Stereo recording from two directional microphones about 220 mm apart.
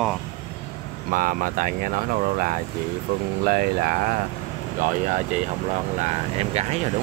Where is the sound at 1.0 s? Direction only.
40° right (ahead or behind).